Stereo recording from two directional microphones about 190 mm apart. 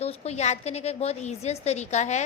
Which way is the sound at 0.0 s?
35° left (ahead or behind).